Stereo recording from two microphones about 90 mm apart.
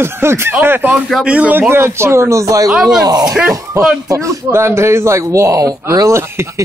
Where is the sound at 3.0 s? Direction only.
45° right (ahead or behind).